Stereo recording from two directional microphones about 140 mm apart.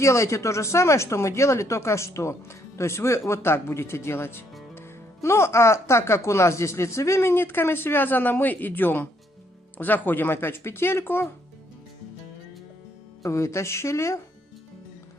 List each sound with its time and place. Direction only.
0.0 s speech: 20° left (ahead or behind)
13.2 s speech: 20° left (ahead or behind)